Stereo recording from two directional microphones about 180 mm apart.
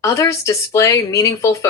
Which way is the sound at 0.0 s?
15° left (ahead or behind).